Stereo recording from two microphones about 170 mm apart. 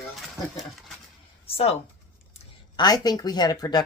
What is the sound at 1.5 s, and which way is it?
Speech, 35° left (ahead or behind).